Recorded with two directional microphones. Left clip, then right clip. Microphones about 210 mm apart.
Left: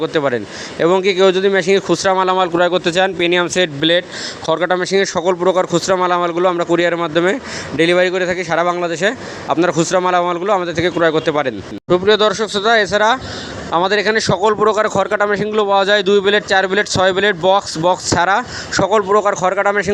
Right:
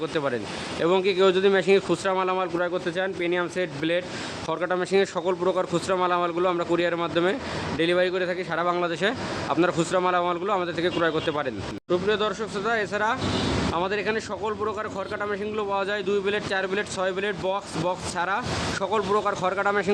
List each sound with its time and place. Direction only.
0.0 s speech: 30° left (ahead or behind)
8.8 s speech: 25° left (ahead or behind)